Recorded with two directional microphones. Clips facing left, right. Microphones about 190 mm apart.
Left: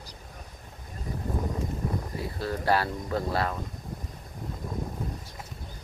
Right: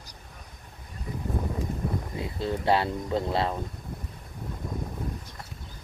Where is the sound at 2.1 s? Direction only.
20° right (ahead or behind).